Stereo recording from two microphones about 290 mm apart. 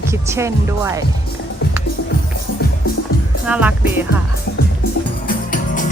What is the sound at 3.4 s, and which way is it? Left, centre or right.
Speech, centre.